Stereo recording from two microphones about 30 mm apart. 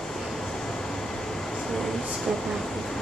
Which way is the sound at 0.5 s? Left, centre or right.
Centre.